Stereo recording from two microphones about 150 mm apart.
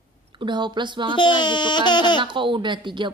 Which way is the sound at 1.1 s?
30° left (ahead or behind).